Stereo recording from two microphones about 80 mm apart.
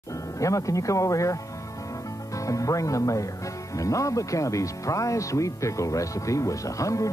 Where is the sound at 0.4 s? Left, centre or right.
Left.